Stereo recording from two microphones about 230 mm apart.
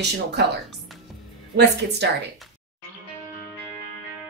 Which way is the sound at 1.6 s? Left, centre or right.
Right.